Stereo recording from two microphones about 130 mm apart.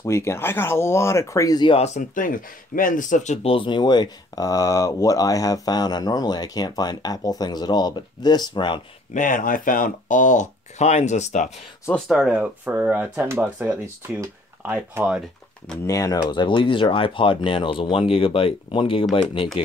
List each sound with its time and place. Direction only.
0.0 s speech: 20° left (ahead or behind)
2.0 s speech: 90° left
3.4 s speech: 40° left (ahead or behind)
9.1 s speech: 90° left; by 11.5 s 65° left (ahead or behind)
11.9 s speech: 5° right (ahead or behind)
15.9 s speech: 25° left (ahead or behind); by 19.6 s 45° left (ahead or behind)